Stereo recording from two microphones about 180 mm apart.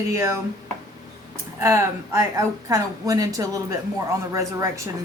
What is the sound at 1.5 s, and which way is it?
A woman's voice, 15° right (ahead or behind).